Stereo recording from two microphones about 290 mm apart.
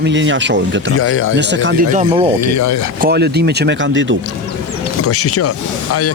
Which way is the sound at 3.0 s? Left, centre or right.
Right.